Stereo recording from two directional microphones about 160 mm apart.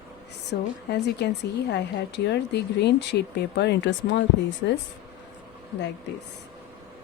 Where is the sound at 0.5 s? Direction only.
90° left.